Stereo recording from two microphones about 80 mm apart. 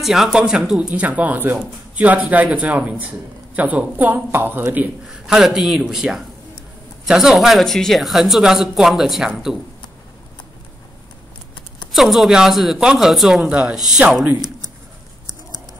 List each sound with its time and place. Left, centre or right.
0.0 s a man's voice: centre; by 4.8 s right
5.0 s a man's voice: centre
11.9 s speech: centre